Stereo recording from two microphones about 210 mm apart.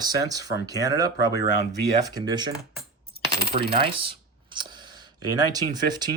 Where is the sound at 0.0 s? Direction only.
20° right (ahead or behind).